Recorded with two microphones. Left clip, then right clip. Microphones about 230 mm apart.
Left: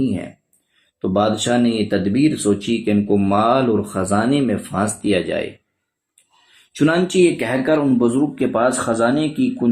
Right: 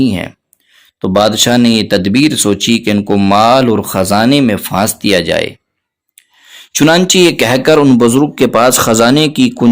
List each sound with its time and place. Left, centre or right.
1.0 s speech: right
6.7 s speech: right